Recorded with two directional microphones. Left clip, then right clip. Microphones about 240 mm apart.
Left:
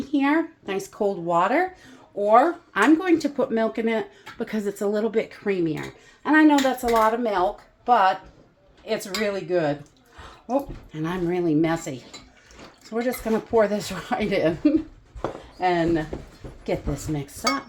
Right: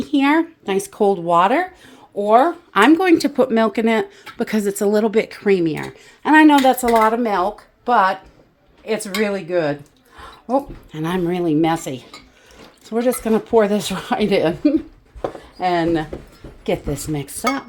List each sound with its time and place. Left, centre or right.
0.0 s speech: right